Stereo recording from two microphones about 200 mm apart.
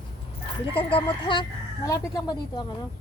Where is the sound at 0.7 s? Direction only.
25° left (ahead or behind).